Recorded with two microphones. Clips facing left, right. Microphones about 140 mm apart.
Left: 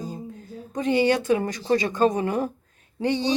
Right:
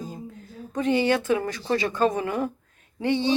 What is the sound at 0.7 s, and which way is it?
A woman's voice, 20° left (ahead or behind).